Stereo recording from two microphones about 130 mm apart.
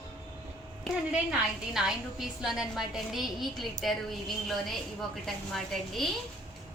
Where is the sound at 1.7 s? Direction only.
5° right (ahead or behind).